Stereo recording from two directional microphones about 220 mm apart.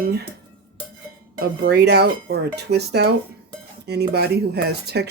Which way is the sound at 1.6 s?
50° right (ahead or behind).